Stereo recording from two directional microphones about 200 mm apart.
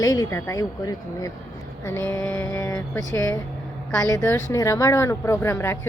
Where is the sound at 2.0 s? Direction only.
10° left (ahead or behind).